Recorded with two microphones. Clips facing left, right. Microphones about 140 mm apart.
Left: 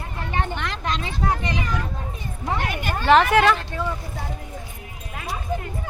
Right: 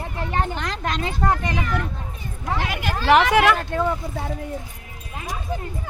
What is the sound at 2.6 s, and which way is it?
Speech, 90° right.